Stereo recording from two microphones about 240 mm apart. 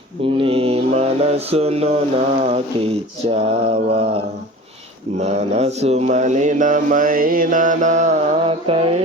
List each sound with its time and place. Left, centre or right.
0.2 s mantra: right